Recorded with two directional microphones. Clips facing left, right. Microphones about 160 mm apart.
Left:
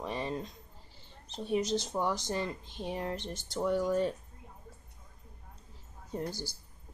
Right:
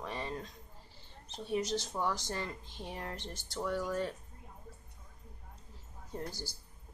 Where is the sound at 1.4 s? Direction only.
20° left (ahead or behind).